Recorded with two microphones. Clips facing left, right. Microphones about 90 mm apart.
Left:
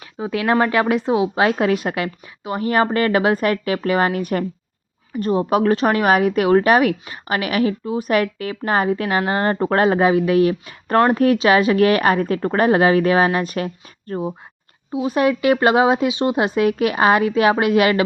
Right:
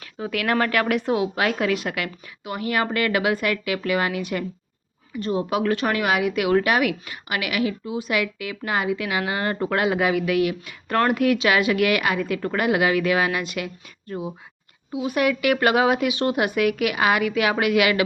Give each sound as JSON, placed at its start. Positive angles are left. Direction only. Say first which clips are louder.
{"t": 0.0, "sound": "a woman's voice", "louder": "left 4 dB", "side_deg": 25}
{"t": 14.1, "sound": "speech", "louder": "left 6 dB", "side_deg": 50}
{"t": 14.9, "sound": "a woman's voice", "louder": "left 4 dB", "side_deg": 30}